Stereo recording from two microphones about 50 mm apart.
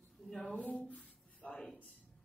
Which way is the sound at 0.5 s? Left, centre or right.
Left.